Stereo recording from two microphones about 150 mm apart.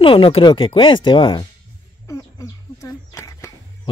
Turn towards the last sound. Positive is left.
turn(degrees=20)  # may be behind; listen again after turning